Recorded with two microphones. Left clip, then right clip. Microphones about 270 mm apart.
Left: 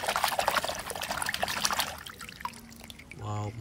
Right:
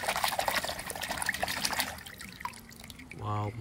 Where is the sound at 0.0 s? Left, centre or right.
Centre.